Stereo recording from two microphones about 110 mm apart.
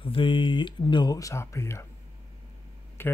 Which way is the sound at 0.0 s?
50° left (ahead or behind).